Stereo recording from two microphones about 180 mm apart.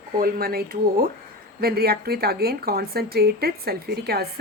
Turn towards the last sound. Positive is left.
turn(degrees=-60)  # may be behind; listen again after turning